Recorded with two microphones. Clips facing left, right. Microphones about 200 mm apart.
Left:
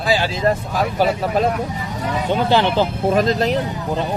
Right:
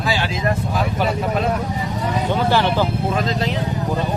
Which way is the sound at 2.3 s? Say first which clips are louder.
Left 2 dB; 20° left (ahead or behind).